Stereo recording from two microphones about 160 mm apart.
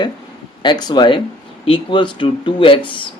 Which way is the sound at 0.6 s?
25° left (ahead or behind).